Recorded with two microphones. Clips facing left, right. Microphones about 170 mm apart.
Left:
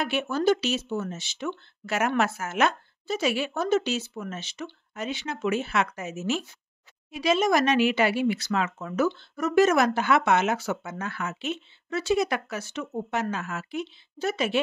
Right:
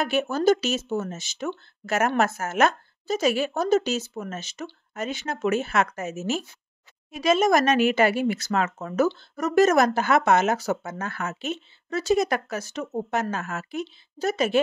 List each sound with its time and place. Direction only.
0.0 s speech: 40° right (ahead or behind)